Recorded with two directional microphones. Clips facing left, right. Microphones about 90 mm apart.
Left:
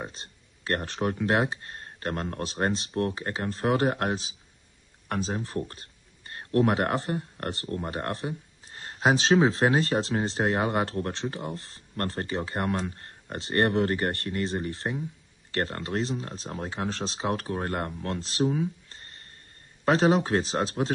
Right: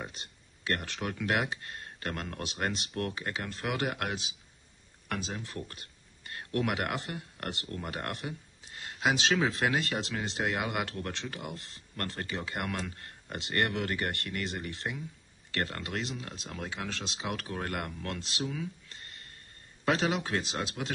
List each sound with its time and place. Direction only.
0.0 s speech: 35° left (ahead or behind)